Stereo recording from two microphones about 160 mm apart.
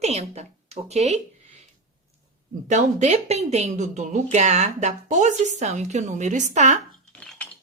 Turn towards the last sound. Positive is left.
turn(degrees=10)  # may be behind; listen again after turning